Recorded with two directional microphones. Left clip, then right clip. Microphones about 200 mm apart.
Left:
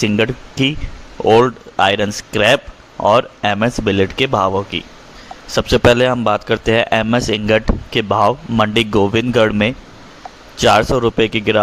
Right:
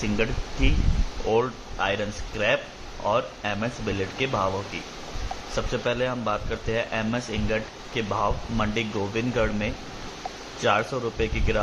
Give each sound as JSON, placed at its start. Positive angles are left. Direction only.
{"t": 0.0, "sound": "a man's voice", "side_deg": 55}